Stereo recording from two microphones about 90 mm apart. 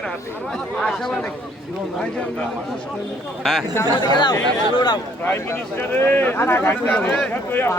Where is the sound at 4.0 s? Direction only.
60° left (ahead or behind).